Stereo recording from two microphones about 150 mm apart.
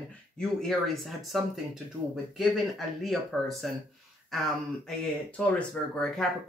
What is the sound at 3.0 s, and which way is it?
Speech, centre (ahead or behind).